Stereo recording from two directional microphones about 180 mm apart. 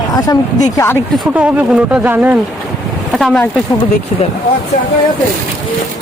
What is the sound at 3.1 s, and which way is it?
Speech, centre (ahead or behind).